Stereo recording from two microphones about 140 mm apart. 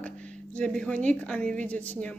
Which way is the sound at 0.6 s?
5° left (ahead or behind).